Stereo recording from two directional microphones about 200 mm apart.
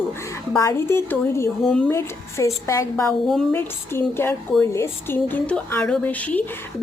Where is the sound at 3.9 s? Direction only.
10° left (ahead or behind).